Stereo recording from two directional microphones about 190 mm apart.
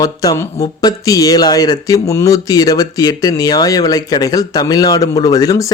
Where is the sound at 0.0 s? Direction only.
20° left (ahead or behind).